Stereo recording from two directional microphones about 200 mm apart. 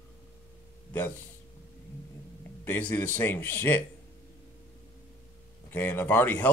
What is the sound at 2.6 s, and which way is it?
Speech, 10° left (ahead or behind).